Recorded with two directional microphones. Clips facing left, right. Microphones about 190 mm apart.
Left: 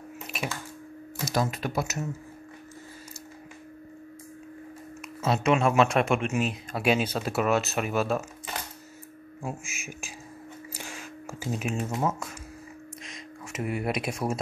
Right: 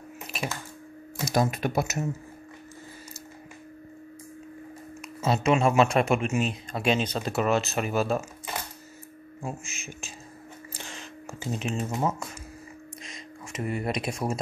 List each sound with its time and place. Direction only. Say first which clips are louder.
1.2 s speech: right 3 dB; 15° right (ahead or behind)
5.2 s speech: right 1 dB; centre (ahead or behind)
9.4 s speech: even; 10° left (ahead or behind)
10.7 s a sound: even; 10° left (ahead or behind)